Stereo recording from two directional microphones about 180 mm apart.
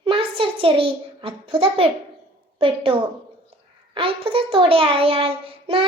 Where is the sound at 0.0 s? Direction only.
30° right (ahead or behind).